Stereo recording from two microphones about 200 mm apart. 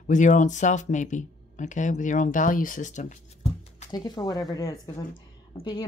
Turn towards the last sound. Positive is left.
turn(degrees=20)  # may be behind; listen again after turning